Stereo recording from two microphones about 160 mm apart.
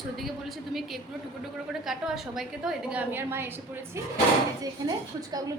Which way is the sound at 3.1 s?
15° right (ahead or behind).